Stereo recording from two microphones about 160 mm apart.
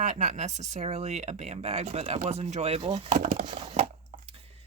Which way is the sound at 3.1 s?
55° right (ahead or behind).